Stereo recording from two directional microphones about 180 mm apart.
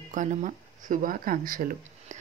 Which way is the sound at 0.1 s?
45° right (ahead or behind).